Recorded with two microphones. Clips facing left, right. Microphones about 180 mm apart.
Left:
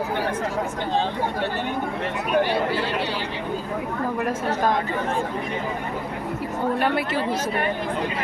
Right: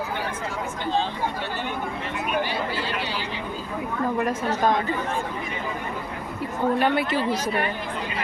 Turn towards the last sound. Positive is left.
turn(degrees=5)  # may be behind; listen again after turning